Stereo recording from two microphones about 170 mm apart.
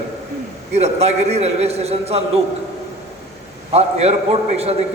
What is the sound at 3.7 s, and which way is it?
A man's voice, 40° right (ahead or behind).